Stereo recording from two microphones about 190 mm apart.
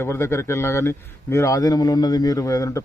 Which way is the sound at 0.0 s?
15° left (ahead or behind).